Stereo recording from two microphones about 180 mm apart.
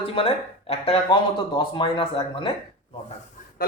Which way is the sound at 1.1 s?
25° left (ahead or behind).